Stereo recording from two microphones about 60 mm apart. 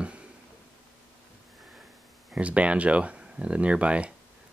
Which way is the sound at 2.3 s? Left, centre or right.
Right.